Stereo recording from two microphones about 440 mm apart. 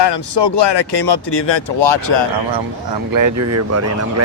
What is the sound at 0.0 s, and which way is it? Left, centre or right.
Speech, left.